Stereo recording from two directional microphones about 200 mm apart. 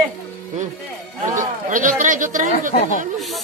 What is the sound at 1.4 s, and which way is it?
Speech, 40° right (ahead or behind).